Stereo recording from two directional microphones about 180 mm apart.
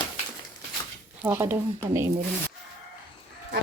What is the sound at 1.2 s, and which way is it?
Speech, 10° right (ahead or behind).